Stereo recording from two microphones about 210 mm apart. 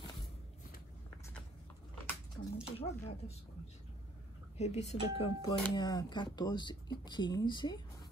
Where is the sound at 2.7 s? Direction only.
30° left (ahead or behind).